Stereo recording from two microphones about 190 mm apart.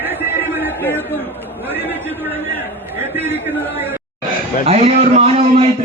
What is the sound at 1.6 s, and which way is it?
A man's voice, 10° right (ahead or behind).